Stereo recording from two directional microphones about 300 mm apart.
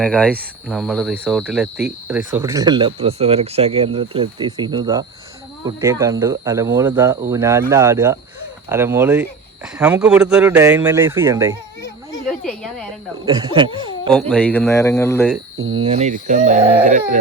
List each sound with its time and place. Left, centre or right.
0.0 s a man's voice: centre
11.8 s a sound: centre
13.2 s speech: centre
14.1 s a man's voice: centre
15.7 s speech: centre